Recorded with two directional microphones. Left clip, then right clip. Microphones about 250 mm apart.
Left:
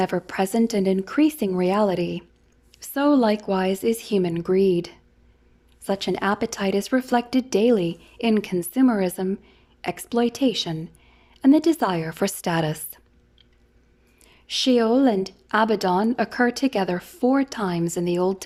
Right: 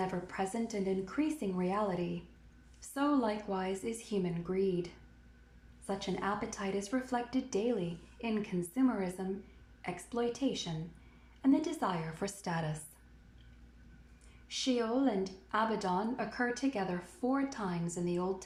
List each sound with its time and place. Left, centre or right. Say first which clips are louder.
0.0 s a woman's voice: left 13 dB; left
14.4 s a woman's voice: left 14 dB; left